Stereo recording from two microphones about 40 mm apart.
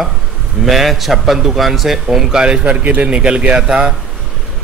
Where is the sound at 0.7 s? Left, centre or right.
Centre.